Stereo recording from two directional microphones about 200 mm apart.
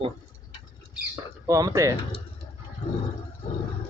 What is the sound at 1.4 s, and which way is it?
Speech, 15° right (ahead or behind).